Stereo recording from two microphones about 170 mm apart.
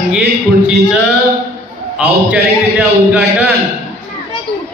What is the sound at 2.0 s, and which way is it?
A man's voice, 5° right (ahead or behind).